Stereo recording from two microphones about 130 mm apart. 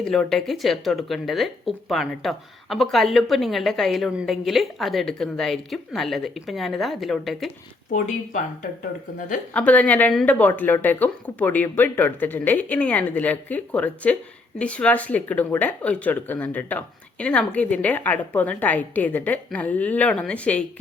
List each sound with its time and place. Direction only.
0.0 s speech: 5° left (ahead or behind)
7.9 s speech: 70° left (ahead or behind)
8.8 s speech: 90° left
9.5 s speech: 10° left (ahead or behind)